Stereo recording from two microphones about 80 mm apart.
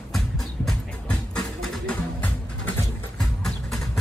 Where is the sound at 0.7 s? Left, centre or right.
Centre.